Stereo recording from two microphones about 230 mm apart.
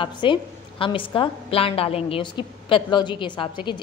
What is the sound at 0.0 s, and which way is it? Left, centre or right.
A woman's voice, left.